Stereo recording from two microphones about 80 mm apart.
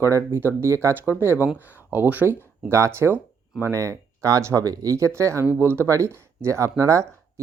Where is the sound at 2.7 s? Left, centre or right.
Right.